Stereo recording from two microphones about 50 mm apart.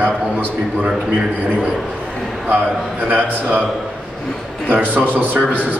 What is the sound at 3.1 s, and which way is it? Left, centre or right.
Speech, right.